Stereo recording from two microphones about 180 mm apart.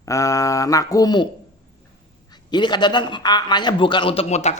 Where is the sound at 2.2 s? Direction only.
25° left (ahead or behind).